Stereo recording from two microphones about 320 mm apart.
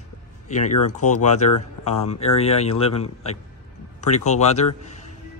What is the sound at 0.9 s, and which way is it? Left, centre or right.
Speech, left.